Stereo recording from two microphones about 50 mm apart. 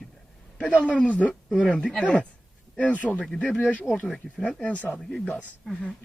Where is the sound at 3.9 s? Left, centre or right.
Centre.